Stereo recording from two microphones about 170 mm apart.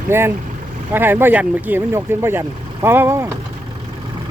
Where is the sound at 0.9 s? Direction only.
10° right (ahead or behind).